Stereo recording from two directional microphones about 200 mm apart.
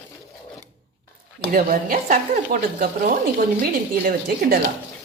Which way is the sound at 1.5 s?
45° right (ahead or behind).